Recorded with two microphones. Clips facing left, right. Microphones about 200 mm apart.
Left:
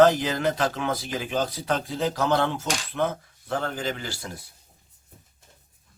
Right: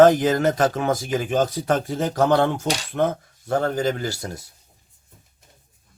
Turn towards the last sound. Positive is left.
turn(degrees=-45)  # may be behind; listen again after turning